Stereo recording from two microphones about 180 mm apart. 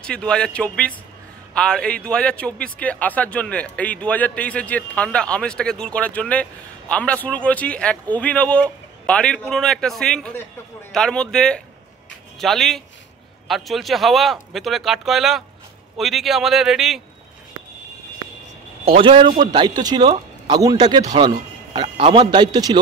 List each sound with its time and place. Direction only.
0.0 s speech: 5° left (ahead or behind)
18.9 s speech: 30° right (ahead or behind)